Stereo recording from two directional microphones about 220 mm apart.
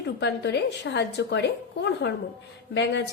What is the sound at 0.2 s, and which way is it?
A woman's voice, 50° left (ahead or behind).